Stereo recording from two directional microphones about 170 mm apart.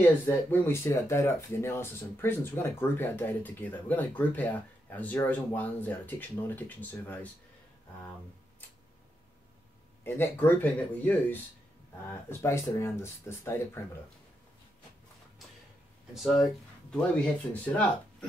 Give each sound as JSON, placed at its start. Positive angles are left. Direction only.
{"t": 0.3, "sound": "speech", "side_deg": 15}
{"t": 10.0, "sound": "speech", "side_deg": 15}
{"t": 16.1, "sound": "speech", "side_deg": 0}